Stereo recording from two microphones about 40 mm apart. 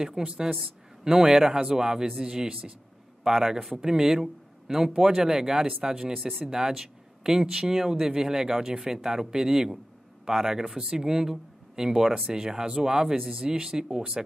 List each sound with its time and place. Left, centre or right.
0.0 s speech: centre